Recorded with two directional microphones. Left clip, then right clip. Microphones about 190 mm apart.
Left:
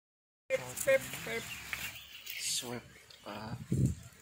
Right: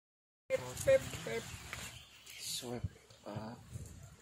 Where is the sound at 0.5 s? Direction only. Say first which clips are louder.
Left 1 dB; 70° right (ahead or behind).